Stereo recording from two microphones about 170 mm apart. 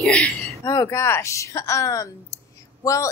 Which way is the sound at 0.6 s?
20° left (ahead or behind).